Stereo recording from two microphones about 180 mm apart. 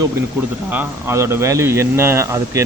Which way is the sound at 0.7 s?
10° right (ahead or behind).